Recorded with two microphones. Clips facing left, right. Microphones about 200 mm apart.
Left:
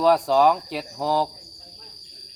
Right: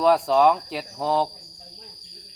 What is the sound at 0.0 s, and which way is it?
Speech, centre (ahead or behind).